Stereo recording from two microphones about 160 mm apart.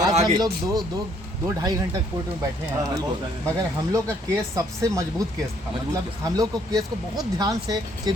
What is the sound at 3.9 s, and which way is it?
Speech, 20° right (ahead or behind).